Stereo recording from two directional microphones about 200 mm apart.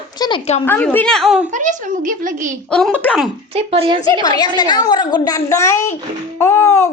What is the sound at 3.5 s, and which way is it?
Speech, 30° right (ahead or behind).